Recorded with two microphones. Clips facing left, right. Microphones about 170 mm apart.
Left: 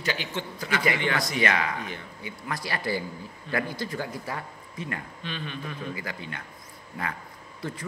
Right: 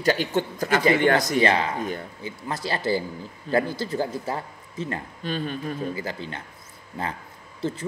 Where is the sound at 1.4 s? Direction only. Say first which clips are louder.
Right 5 dB; 30° right (ahead or behind).